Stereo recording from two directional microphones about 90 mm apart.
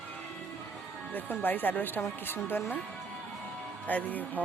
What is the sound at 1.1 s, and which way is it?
A woman's voice, 20° left (ahead or behind).